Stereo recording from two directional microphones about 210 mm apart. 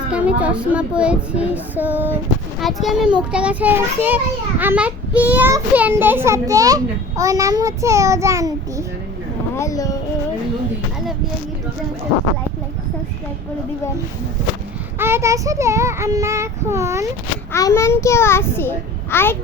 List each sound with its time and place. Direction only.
0.1 s a child's voice: 5° right (ahead or behind)
9.6 s speech: 15° left (ahead or behind)
14.9 s a child's voice: 10° right (ahead or behind)
17.5 s a child's voice: 15° left (ahead or behind)